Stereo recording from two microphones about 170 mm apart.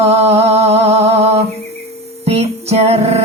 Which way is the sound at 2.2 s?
35° right (ahead or behind).